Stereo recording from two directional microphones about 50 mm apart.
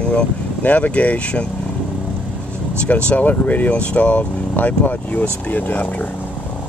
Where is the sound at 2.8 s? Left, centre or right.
Left.